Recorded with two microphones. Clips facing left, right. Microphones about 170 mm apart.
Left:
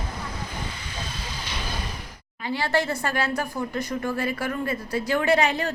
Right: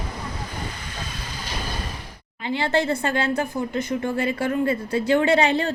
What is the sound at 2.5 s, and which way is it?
A woman's voice, 25° right (ahead or behind).